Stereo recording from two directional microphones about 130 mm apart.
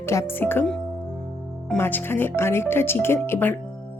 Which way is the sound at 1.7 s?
15° left (ahead or behind).